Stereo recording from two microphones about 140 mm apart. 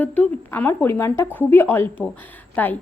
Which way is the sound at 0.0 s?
10° left (ahead or behind).